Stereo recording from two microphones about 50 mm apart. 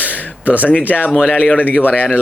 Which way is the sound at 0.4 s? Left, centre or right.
Left.